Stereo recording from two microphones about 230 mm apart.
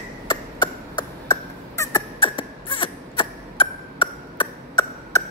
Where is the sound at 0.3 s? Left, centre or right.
Centre.